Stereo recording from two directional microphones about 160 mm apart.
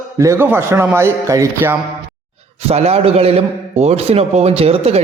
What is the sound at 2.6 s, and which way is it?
A man's voice, 40° right (ahead or behind).